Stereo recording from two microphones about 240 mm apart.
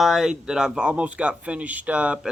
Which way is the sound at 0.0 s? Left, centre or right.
Centre.